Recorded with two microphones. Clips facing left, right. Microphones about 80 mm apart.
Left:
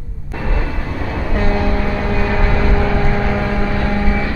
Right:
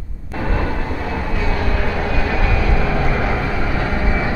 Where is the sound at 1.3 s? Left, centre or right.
Left.